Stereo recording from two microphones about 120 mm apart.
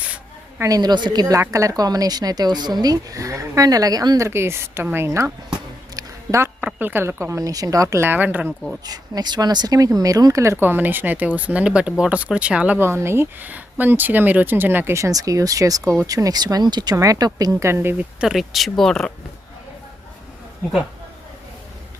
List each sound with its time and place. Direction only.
0.6 s a woman's voice: 30° right (ahead or behind)
4.3 s speech: 20° right (ahead or behind)
6.0 s a sound: 25° right (ahead or behind)
6.6 s speech: 15° right (ahead or behind)
8.8 s a woman's voice: 35° right (ahead or behind)
18.2 s speech: centre (ahead or behind)